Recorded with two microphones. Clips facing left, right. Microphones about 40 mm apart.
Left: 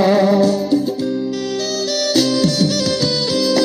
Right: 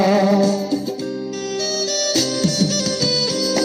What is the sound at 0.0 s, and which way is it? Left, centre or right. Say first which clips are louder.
Music: left 2 dB; left.